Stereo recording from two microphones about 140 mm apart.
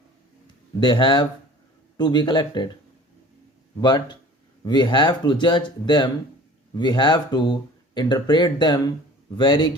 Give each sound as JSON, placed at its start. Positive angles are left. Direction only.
{"t": 0.8, "sound": "speech", "side_deg": 35}
{"t": 3.8, "sound": "speech", "side_deg": 30}